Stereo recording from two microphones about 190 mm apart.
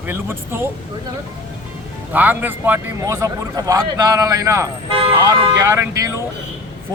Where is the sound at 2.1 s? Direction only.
10° right (ahead or behind).